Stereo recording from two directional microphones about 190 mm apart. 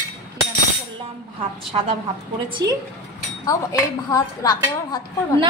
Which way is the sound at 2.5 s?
20° right (ahead or behind).